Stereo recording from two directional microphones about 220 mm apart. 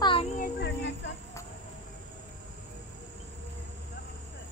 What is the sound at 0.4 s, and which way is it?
Child singing, 50° left (ahead or behind).